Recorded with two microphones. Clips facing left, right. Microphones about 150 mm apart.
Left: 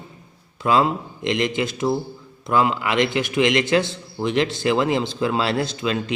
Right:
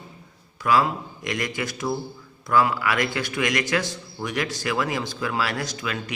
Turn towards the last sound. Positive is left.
turn(degrees=25)  # may be behind; listen again after turning